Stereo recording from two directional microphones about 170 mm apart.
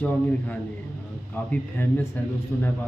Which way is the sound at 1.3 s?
10° left (ahead or behind).